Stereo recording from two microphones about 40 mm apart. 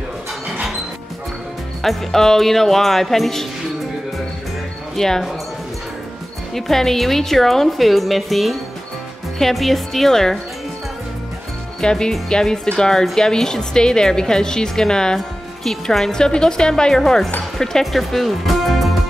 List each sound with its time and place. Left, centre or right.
1.8 s a woman's voice: centre
4.9 s speech: centre
6.5 s a woman's voice: centre
11.8 s a woman's voice: centre